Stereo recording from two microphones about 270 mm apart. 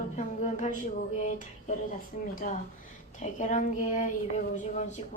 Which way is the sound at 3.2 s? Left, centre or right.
Left.